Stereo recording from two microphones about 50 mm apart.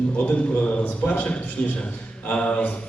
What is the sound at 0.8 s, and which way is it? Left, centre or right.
A man's voice, left.